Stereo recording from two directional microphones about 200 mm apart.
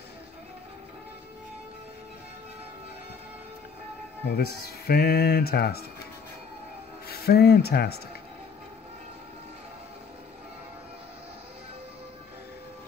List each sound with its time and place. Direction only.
4.3 s speech: 50° left (ahead or behind)
7.1 s speech: 55° left (ahead or behind)